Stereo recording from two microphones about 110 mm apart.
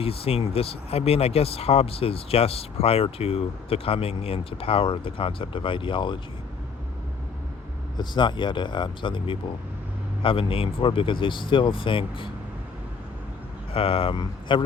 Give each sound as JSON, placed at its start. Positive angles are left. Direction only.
{"t": 0.0, "sound": "speech", "side_deg": 60}
{"t": 7.9, "sound": "speech", "side_deg": 45}
{"t": 13.7, "sound": "speech", "side_deg": 55}